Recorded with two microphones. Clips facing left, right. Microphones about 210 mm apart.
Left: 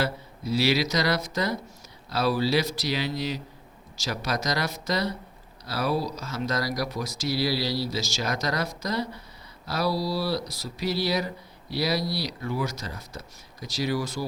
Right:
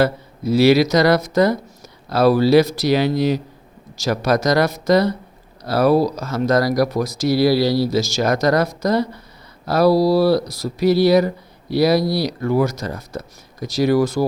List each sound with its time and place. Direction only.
0.0 s speech: 50° right (ahead or behind)